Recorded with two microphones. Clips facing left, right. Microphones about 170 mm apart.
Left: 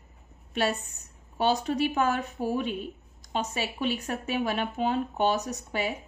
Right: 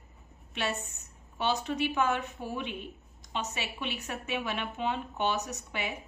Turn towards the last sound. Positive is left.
turn(degrees=35)  # may be behind; listen again after turning